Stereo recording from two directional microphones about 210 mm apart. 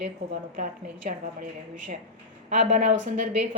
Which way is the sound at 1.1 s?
35° right (ahead or behind).